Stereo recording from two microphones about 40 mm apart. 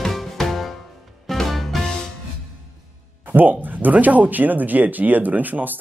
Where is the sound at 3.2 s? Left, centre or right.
Right.